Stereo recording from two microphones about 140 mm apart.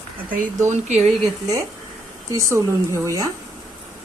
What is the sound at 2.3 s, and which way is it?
Speech, 20° right (ahead or behind).